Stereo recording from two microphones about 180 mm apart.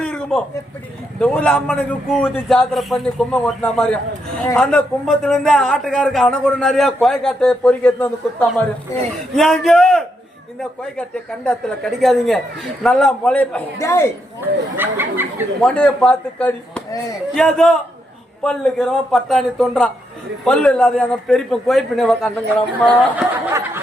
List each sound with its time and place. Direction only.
0.0 s a sound: 5° left (ahead or behind)
1.2 s a man's voice: 5° left (ahead or behind)
14.4 s speech: 10° right (ahead or behind)
15.6 s a man's voice: 5° left (ahead or behind)
23.0 s speech: 10° right (ahead or behind)